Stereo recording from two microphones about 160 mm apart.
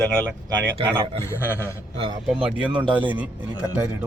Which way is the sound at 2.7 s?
30° right (ahead or behind).